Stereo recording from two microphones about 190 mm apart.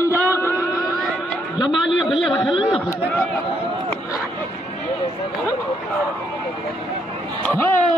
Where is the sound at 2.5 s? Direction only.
30° left (ahead or behind).